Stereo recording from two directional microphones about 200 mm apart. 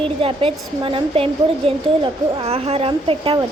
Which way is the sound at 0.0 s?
30° right (ahead or behind).